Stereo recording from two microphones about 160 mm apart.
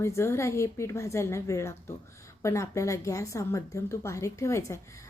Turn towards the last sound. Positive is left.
turn(degrees=20)  # may be behind; listen again after turning